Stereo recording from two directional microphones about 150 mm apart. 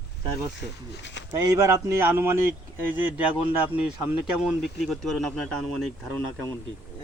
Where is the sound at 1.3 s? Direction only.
20° right (ahead or behind).